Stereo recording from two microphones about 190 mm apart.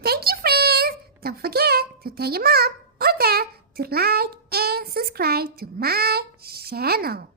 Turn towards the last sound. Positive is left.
turn(degrees=-55)  # may be behind; listen again after turning